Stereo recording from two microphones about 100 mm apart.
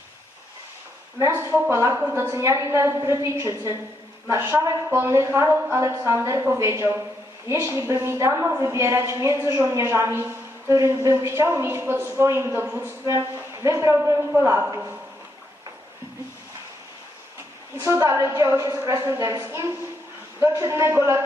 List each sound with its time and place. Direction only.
1.4 s a woman's voice: 25° right (ahead or behind)
17.8 s a woman's voice: 30° right (ahead or behind)